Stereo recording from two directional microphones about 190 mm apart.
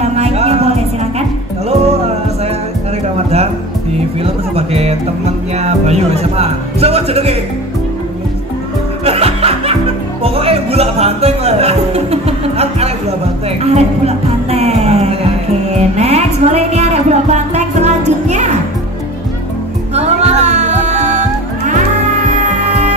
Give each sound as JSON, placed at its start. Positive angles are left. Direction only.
{"t": 0.0, "sound": "music", "side_deg": -35}
{"t": 4.2, "sound": "speech", "side_deg": -30}
{"t": 9.0, "sound": "music", "side_deg": -30}
{"t": 19.9, "sound": "music", "side_deg": -35}